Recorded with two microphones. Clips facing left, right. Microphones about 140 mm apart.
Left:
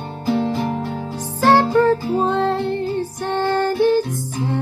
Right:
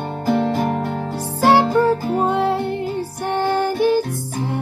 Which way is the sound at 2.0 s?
55° right (ahead or behind).